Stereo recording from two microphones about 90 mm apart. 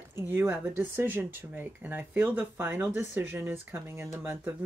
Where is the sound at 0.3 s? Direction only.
25° right (ahead or behind).